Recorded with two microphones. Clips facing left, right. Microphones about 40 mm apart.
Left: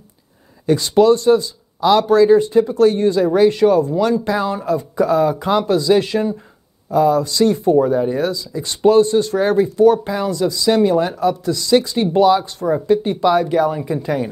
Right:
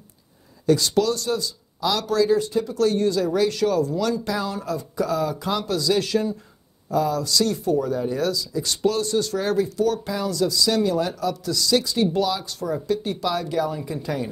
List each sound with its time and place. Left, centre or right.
0.7 s speech: left